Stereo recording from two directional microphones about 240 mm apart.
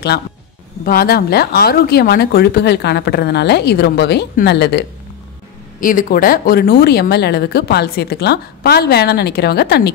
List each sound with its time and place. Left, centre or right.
0.8 s speech: left